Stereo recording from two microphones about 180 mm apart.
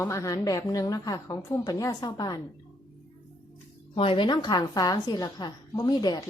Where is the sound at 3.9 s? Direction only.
30° left (ahead or behind).